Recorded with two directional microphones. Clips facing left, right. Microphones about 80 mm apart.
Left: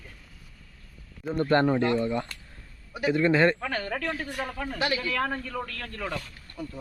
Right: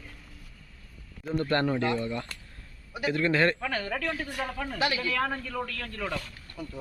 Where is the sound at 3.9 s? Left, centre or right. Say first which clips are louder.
Left 1 dB; left.